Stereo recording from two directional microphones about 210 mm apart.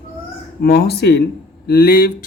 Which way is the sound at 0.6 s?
50° left (ahead or behind).